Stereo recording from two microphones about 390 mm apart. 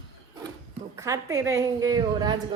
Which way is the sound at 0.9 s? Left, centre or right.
Centre.